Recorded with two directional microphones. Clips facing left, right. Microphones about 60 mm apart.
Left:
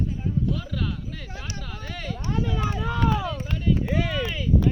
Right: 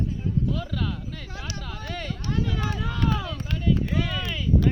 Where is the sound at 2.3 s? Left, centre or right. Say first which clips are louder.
Left 1 dB; left.